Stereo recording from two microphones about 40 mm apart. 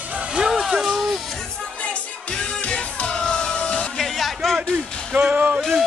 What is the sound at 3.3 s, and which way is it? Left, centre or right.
Music, left.